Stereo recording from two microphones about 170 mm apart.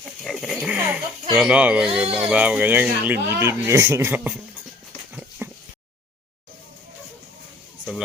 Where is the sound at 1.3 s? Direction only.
5° right (ahead or behind).